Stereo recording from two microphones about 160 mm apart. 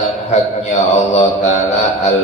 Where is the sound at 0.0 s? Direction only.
45° left (ahead or behind).